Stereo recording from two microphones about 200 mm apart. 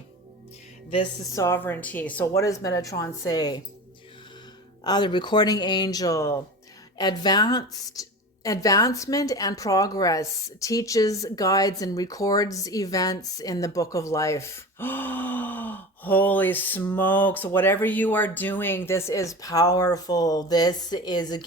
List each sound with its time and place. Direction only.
1.4 s a woman's voice: 10° left (ahead or behind)
4.8 s a woman's voice: 20° left (ahead or behind)